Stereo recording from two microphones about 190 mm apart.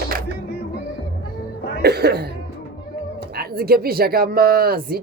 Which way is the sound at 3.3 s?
55° right (ahead or behind).